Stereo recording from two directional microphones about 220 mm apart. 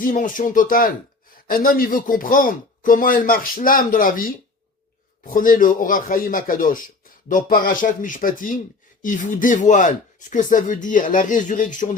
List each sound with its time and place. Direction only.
0.0 s speech: 35° left (ahead or behind)